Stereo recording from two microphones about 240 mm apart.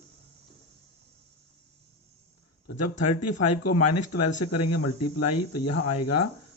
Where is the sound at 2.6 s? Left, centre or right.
Left.